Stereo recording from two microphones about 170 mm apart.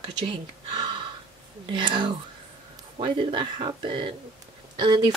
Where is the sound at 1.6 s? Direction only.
30° right (ahead or behind).